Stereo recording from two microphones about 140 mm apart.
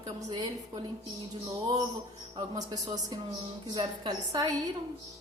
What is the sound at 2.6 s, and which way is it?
Speech, 30° right (ahead or behind).